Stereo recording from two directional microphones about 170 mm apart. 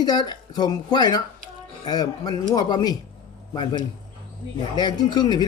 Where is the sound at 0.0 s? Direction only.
25° left (ahead or behind).